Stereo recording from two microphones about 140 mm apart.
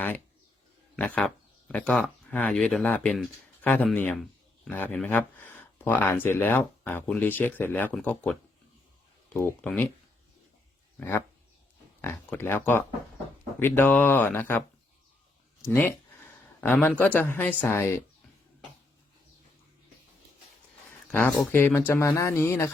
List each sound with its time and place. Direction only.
0.9 s speech: 10° left (ahead or behind)
10.9 s speech: 15° left (ahead or behind)
15.7 s a sound: 15° left (ahead or behind)
17.0 s speech: 15° left (ahead or behind)
21.1 s speech: 10° left (ahead or behind)